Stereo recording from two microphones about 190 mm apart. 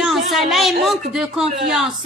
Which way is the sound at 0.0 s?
Centre (ahead or behind).